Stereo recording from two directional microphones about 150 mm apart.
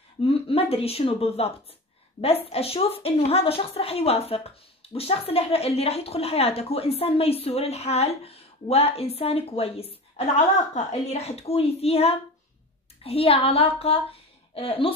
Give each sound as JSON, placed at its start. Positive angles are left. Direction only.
{"t": 0.2, "sound": "a woman's voice", "side_deg": 40}